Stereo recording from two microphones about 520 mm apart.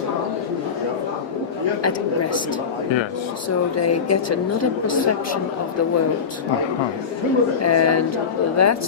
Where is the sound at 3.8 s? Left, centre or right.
Left.